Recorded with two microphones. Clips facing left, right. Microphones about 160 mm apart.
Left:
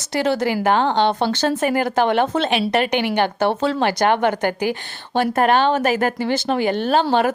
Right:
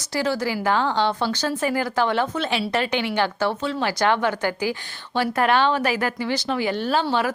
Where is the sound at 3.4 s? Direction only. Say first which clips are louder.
Left 5 dB; 75° left (ahead or behind).